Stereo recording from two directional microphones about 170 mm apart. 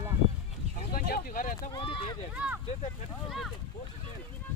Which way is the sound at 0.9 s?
60° left (ahead or behind).